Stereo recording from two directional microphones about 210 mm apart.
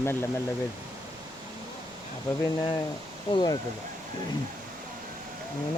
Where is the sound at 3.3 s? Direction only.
20° left (ahead or behind).